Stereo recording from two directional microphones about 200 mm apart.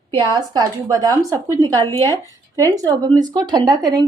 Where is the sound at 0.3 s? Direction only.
20° right (ahead or behind).